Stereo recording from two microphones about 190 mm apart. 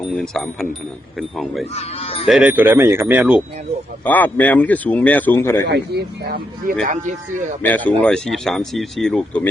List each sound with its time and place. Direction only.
0.2 s speech: centre (ahead or behind)
1.7 s speech: 30° left (ahead or behind)
2.2 s speech: 5° right (ahead or behind)
4.0 s speech: 10° left (ahead or behind)
5.6 s speech: 60° right (ahead or behind)
6.8 s speech: 40° right (ahead or behind)
7.9 s speech: 5° left (ahead or behind)